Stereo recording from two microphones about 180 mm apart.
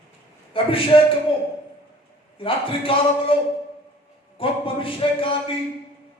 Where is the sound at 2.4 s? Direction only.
30° left (ahead or behind).